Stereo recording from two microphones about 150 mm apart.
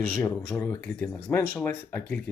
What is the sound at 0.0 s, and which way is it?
Speech, 10° left (ahead or behind).